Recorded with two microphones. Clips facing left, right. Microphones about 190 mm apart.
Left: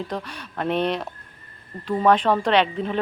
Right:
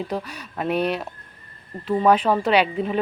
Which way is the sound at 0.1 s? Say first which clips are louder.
Right 2 dB; 10° right (ahead or behind).